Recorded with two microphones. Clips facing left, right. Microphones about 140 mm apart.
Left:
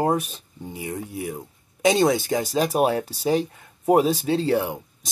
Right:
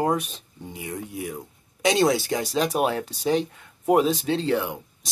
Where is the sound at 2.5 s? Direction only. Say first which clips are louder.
Left 2 dB; 40° left (ahead or behind).